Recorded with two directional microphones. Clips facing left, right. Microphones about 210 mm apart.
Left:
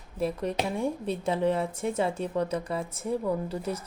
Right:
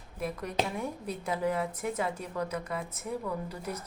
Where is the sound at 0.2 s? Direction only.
30° left (ahead or behind).